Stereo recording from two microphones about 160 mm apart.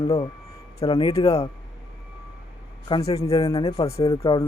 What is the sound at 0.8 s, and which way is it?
Speech, 35° left (ahead or behind).